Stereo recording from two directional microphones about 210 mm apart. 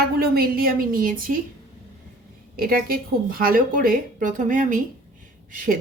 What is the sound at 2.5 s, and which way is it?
A woman's voice, 45° right (ahead or behind).